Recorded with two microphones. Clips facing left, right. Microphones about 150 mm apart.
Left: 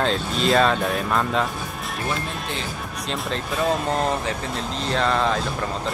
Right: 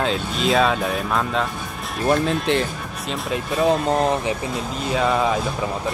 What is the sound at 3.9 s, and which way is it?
Speech, 15° right (ahead or behind).